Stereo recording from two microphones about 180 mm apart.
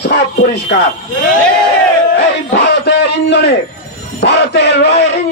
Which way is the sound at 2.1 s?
70° left (ahead or behind).